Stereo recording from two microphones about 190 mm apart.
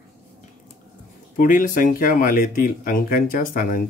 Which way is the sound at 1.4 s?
45° left (ahead or behind).